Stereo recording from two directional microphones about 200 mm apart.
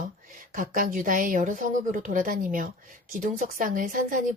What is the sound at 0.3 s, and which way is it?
A woman's voice, 40° right (ahead or behind).